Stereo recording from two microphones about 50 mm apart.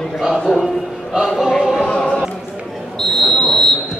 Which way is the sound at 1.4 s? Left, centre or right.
Centre.